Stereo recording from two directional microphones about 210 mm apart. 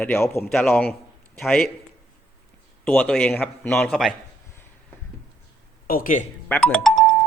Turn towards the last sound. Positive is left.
turn(degrees=0)  # may be behind; listen again after turning